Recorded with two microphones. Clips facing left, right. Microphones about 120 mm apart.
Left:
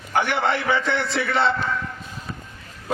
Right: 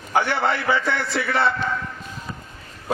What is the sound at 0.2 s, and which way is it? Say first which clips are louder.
A man's voice: even; 20° left (ahead or behind).